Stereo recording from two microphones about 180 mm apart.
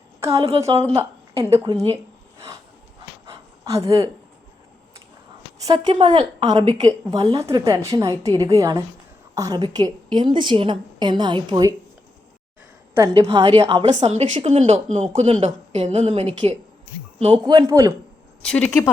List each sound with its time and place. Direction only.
0.2 s a woman's voice: 15° right (ahead or behind)
3.2 s gasp: 20° right (ahead or behind)
5.6 s a woman's voice: 25° right (ahead or behind)
13.0 s a woman's voice: 20° right (ahead or behind)
13.9 s speech: 40° right (ahead or behind)
17.5 s a woman's voice: 20° right (ahead or behind)
18.4 s speech: 5° left (ahead or behind)